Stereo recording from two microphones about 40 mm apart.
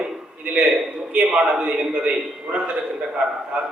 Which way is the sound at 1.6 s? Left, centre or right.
Right.